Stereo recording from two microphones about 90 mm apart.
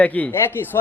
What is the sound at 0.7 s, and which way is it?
Speech, 35° left (ahead or behind).